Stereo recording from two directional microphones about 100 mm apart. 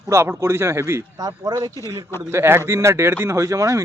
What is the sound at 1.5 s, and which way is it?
Speech, 40° right (ahead or behind).